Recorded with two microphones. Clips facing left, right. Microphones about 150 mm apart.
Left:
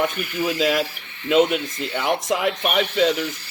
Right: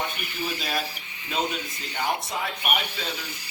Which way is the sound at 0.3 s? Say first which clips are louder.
Left 10 dB; 90° left.